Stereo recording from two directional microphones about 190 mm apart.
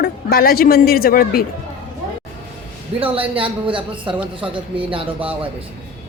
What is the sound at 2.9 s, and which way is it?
A man's voice, 30° right (ahead or behind).